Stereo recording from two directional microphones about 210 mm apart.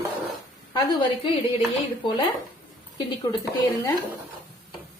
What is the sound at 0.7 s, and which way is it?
Speech, 20° left (ahead or behind).